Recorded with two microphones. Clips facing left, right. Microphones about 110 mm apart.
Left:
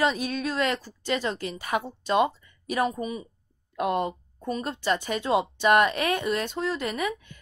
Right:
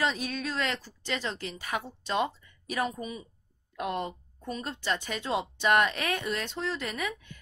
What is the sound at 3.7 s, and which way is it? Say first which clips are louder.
A woman's voice: left 6 dB; 60° left (ahead or behind).